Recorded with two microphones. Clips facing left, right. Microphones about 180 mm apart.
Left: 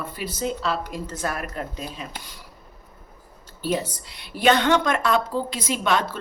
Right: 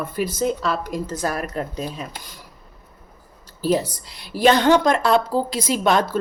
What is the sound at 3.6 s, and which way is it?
A woman's voice, 35° right (ahead or behind).